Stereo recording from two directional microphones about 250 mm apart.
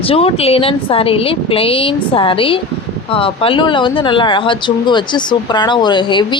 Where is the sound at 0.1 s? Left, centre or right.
Left.